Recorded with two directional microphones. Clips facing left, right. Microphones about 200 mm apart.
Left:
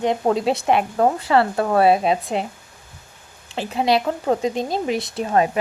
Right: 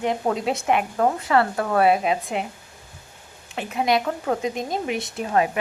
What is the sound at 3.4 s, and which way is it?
Speech, 30° left (ahead or behind).